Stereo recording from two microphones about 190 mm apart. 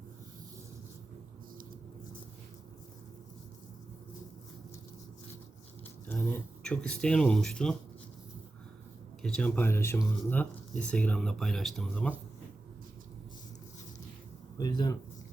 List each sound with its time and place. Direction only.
6.1 s speech: 5° left (ahead or behind)
9.2 s speech: 5° left (ahead or behind)
14.6 s speech: 20° left (ahead or behind)